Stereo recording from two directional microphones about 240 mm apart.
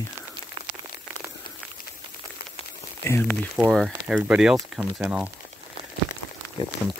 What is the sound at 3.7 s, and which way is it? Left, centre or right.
Speech, centre.